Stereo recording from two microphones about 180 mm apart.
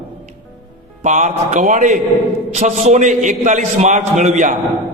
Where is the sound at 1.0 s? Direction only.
40° right (ahead or behind).